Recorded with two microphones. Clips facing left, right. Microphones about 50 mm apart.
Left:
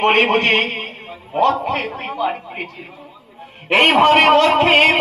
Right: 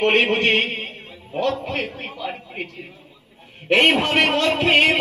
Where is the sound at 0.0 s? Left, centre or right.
Left.